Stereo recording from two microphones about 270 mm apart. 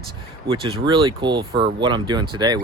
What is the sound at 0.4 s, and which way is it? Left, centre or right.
Speech, centre.